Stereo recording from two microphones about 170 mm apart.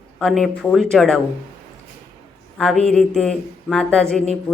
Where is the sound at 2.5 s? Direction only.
5° left (ahead or behind).